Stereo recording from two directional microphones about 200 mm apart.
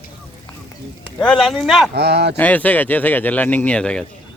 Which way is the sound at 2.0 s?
55° right (ahead or behind).